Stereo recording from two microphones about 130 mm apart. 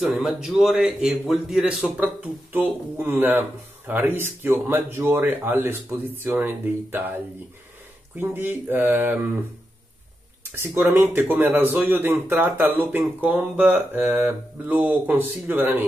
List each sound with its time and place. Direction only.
0.0 s a man's voice: centre (ahead or behind)
8.2 s speech: 15° right (ahead or behind)
10.4 s speech: 15° right (ahead or behind)